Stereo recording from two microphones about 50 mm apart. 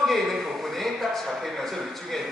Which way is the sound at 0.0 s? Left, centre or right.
Centre.